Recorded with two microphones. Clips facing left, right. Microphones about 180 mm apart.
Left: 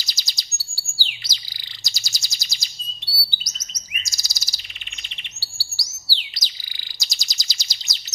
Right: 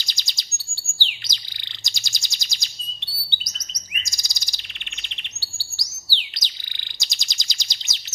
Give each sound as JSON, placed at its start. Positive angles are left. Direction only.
{"t": 0.0, "sound": "bird", "side_deg": 5}
{"t": 5.0, "sound": "chirp", "side_deg": 5}
{"t": 6.1, "sound": "bird", "side_deg": 5}